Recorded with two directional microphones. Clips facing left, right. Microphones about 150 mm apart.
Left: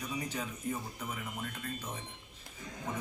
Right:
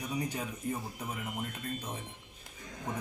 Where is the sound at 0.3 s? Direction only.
15° right (ahead or behind).